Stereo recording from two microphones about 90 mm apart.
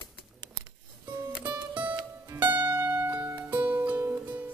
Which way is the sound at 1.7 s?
15° right (ahead or behind).